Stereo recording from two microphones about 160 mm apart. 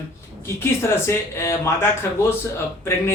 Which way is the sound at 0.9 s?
15° left (ahead or behind).